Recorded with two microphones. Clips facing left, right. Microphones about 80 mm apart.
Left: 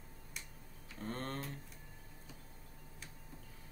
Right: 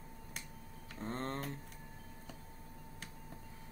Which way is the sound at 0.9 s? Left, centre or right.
Right.